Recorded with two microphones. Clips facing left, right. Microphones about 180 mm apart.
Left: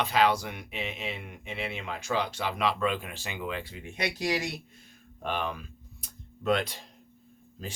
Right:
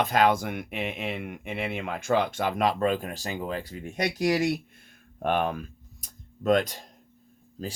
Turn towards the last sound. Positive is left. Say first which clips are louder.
# right 5 dB
turn(degrees=-40)  # may be behind; listen again after turning